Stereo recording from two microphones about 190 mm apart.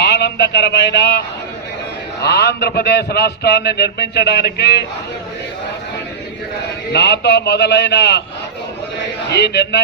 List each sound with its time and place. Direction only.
0.0 s speech: 65° left (ahead or behind)
2.2 s a man's voice: 60° left (ahead or behind)
6.9 s a man's voice: 60° left (ahead or behind)
9.3 s a man's voice: 60° left (ahead or behind)